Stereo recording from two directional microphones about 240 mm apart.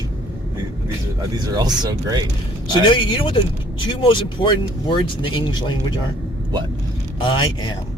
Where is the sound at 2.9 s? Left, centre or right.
Centre.